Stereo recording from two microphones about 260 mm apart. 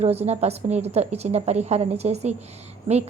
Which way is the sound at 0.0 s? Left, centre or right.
Right.